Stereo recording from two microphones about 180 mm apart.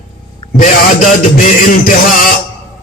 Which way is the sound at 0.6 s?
45° left (ahead or behind).